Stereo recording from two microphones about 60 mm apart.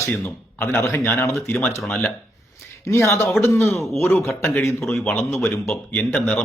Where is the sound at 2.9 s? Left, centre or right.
Left.